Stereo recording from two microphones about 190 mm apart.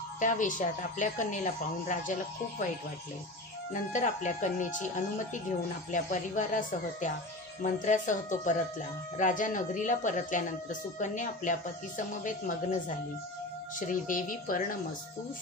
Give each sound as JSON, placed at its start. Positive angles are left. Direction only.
{"t": 0.2, "sound": "speech", "side_deg": 40}
{"t": 3.9, "sound": "speech", "side_deg": 40}
{"t": 5.9, "sound": "speech", "side_deg": 40}
{"t": 13.7, "sound": "speech", "side_deg": 45}